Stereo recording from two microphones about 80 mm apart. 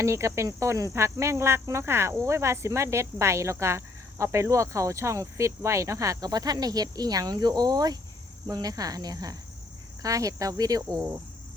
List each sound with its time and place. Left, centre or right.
0.0 s speech: right
8.4 s cricket: right